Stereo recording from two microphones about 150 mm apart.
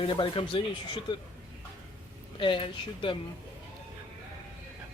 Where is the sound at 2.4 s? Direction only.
35° left (ahead or behind).